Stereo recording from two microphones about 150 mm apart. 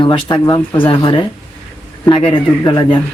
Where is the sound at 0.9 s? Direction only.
35° left (ahead or behind).